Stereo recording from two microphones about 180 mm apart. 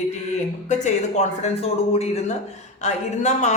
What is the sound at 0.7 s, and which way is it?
A man's voice, 40° left (ahead or behind).